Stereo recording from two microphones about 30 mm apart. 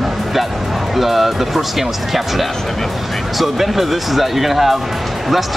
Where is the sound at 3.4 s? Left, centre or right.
Centre.